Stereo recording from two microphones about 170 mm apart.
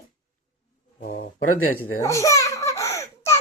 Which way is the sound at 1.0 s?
55° left (ahead or behind).